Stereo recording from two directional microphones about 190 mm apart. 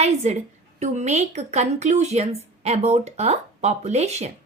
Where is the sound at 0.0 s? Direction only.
35° right (ahead or behind).